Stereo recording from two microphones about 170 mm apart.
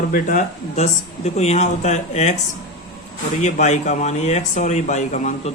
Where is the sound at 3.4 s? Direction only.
45° left (ahead or behind).